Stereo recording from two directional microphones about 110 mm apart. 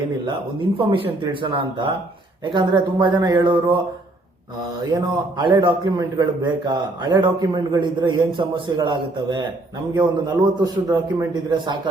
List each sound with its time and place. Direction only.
0.8 s speech: 50° right (ahead or behind)
4.9 s a man's voice: 45° right (ahead or behind); by 11.3 s 30° right (ahead or behind)
11.5 s speech: 45° right (ahead or behind)